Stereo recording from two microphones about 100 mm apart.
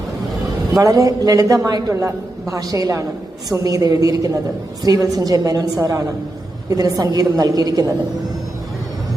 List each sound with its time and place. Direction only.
0.8 s a man's voice: 35° right (ahead or behind)